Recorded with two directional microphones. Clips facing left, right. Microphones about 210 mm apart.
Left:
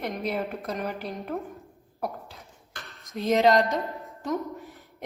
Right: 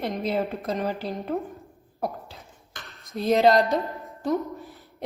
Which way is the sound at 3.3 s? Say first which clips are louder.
Right 2 dB; 35° right (ahead or behind).